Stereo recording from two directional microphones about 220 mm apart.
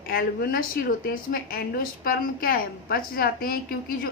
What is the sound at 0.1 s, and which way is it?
A woman's voice, 45° left (ahead or behind).